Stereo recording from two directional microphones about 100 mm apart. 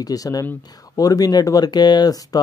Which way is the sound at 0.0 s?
40° left (ahead or behind).